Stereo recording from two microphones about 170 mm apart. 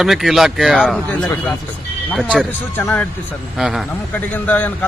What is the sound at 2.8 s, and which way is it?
Speech, 10° left (ahead or behind).